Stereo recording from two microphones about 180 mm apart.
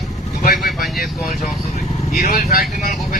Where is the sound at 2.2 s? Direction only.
50° left (ahead or behind).